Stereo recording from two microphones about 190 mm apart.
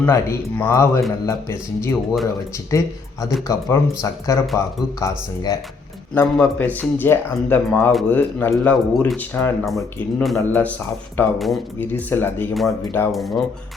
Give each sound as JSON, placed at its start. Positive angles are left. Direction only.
{"t": 0.0, "sound": "speech", "side_deg": 10}
{"t": 6.3, "sound": "speech", "side_deg": 5}
{"t": 12.5, "sound": "speech", "side_deg": 0}